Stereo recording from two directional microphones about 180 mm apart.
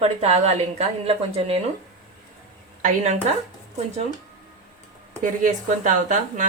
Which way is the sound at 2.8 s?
40° right (ahead or behind).